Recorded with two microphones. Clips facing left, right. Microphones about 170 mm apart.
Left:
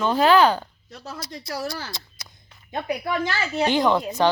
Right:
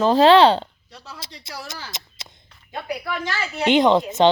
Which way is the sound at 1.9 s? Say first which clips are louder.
Even; 20° right (ahead or behind).